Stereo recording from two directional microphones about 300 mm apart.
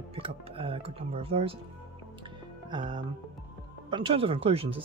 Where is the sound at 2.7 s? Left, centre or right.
Centre.